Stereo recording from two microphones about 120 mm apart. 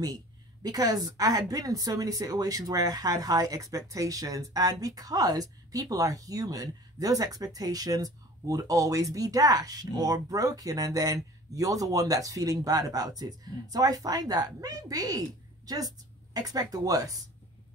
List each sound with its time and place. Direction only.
0.0 s a woman's voice: 30° right (ahead or behind)